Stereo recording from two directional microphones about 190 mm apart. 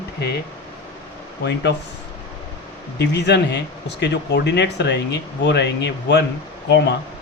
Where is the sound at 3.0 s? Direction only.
65° left (ahead or behind).